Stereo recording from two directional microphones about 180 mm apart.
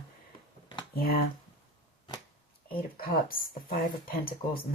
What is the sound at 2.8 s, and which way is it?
Speech, 55° left (ahead or behind).